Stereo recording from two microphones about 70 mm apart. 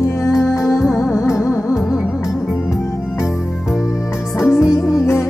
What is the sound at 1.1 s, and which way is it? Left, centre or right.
Music, centre.